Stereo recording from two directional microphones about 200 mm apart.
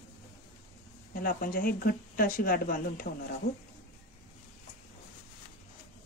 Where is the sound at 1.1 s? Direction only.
45° left (ahead or behind).